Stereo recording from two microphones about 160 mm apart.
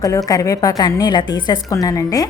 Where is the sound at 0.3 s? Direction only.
20° left (ahead or behind).